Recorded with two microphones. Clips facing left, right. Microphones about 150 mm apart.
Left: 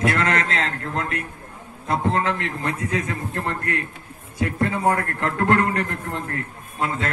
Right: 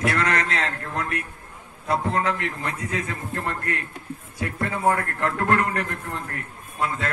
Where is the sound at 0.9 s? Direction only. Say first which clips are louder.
Left 2 dB; 25° left (ahead or behind).